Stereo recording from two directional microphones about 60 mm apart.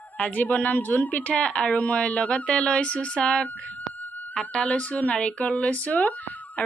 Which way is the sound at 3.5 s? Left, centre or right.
Left.